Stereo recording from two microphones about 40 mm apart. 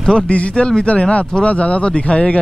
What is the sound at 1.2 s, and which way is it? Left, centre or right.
Speech, left.